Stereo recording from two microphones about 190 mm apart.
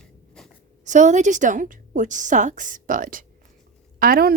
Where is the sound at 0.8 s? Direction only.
40° right (ahead or behind).